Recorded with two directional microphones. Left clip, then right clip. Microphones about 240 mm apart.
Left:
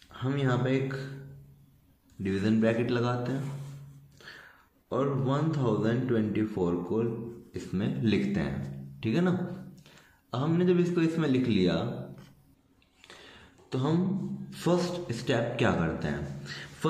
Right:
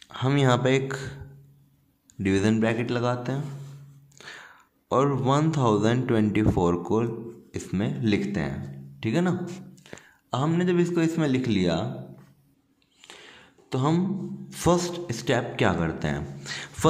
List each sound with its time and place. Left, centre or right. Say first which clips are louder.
0.0 s speech: right 7 dB; right
2.2 s a man's voice: right 4 dB; right
13.0 s a sound: right 4 dB; right
14.5 s a man's voice: right 5 dB; right